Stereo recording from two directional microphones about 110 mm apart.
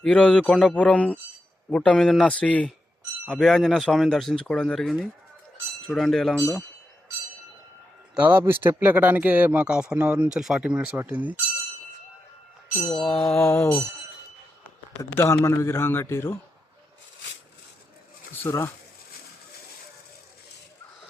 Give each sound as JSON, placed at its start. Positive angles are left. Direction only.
{"t": 0.0, "sound": "speech", "side_deg": 10}
{"t": 8.1, "sound": "a man's voice", "side_deg": -15}
{"t": 12.8, "sound": "speech", "side_deg": 5}
{"t": 15.1, "sound": "a man's voice", "side_deg": 20}
{"t": 18.4, "sound": "a man's voice", "side_deg": 25}